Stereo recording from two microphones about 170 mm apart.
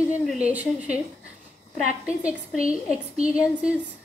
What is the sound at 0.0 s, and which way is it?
Speech, 5° right (ahead or behind).